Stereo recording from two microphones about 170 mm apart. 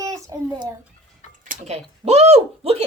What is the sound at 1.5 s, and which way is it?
Speech, 40° right (ahead or behind).